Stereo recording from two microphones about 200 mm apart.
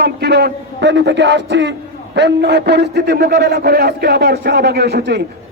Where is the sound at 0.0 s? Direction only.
55° right (ahead or behind).